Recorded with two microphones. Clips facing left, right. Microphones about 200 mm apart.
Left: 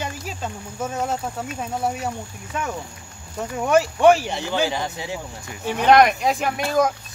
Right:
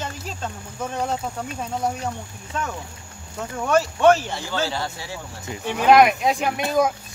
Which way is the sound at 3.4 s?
15° left (ahead or behind).